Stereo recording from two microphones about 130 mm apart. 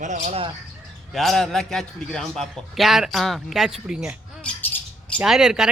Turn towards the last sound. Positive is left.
turn(degrees=-5)  # may be behind; listen again after turning